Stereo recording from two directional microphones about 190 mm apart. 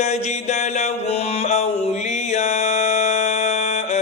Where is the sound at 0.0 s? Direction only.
35° left (ahead or behind).